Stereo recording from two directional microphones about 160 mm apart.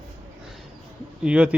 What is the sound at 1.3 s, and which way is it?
Speech, 5° right (ahead or behind).